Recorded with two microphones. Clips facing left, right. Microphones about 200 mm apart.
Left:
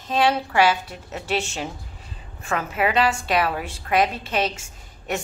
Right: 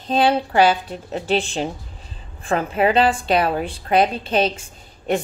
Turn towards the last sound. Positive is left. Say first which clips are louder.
# right 6 dB
turn(degrees=-30)  # may be behind; listen again after turning